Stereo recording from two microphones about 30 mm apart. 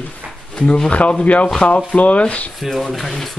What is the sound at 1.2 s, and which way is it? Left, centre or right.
Speech, left.